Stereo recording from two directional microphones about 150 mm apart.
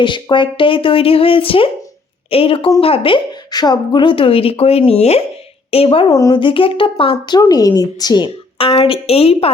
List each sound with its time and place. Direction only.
0.0 s a woman's voice: 30° left (ahead or behind)
6.1 s speech: 20° left (ahead or behind)
6.4 s a woman's voice: 35° left (ahead or behind)